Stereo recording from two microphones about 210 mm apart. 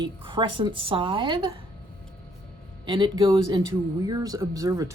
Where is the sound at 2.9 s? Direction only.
20° right (ahead or behind).